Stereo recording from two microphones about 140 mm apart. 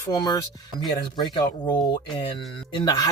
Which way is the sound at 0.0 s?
30° left (ahead or behind).